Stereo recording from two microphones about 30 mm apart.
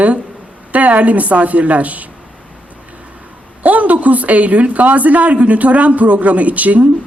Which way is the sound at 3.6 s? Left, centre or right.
Right.